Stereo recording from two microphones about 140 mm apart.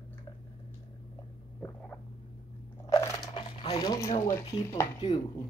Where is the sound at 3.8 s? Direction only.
25° left (ahead or behind).